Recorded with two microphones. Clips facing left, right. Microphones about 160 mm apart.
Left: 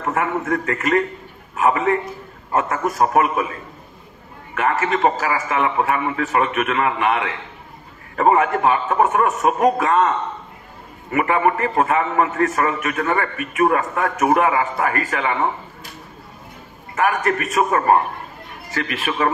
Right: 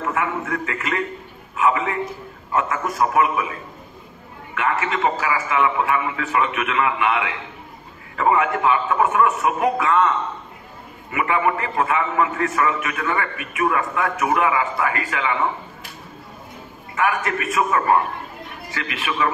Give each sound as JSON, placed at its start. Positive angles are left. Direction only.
{"t": 0.0, "sound": "a man's voice", "side_deg": 40}
{"t": 4.6, "sound": "a man's voice", "side_deg": 40}
{"t": 16.9, "sound": "a man's voice", "side_deg": 40}